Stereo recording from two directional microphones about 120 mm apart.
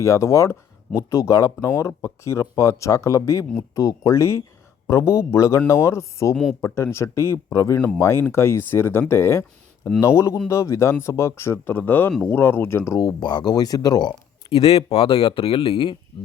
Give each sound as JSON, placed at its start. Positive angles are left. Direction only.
{"t": 0.0, "sound": "speech", "side_deg": 25}
{"t": 6.3, "sound": "speech", "side_deg": -5}
{"t": 6.6, "sound": "speech", "side_deg": 20}
{"t": 14.5, "sound": "speech", "side_deg": 55}